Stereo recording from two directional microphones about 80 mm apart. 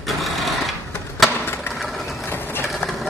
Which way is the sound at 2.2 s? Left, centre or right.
Left.